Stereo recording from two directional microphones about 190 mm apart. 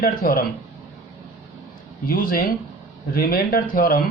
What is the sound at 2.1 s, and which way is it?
Speech, 50° left (ahead or behind).